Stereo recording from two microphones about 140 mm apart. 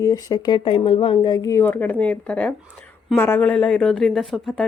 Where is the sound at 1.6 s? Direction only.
10° left (ahead or behind).